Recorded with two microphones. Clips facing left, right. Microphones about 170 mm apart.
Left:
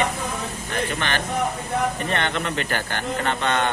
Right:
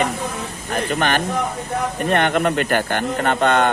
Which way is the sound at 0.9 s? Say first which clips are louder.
Right 7 dB; 50° right (ahead or behind).